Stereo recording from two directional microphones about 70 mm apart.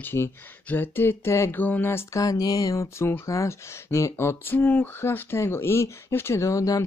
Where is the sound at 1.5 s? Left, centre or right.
Left.